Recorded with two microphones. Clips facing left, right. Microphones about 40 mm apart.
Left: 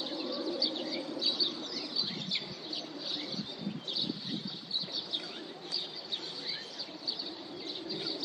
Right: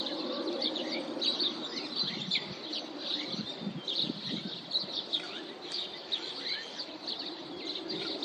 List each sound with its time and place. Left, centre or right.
0.0 s a sound: right
2.0 s bird: right
5.7 s bird: right